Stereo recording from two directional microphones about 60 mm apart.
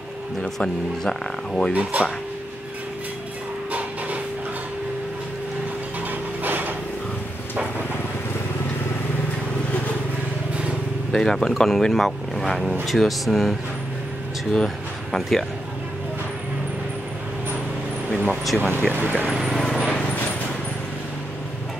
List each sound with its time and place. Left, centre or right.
0.4 s speech: centre
1.7 s speech: right
6.4 s a sound: right
11.1 s speech: centre
18.3 s speech: centre
18.9 s speech: right
19.2 s speech: centre
19.7 s a sound: centre